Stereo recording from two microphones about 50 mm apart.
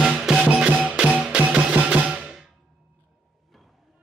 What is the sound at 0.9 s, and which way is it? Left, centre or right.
Music, right.